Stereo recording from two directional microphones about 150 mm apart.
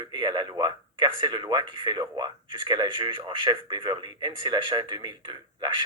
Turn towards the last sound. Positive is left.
turn(degrees=-30)  # may be behind; listen again after turning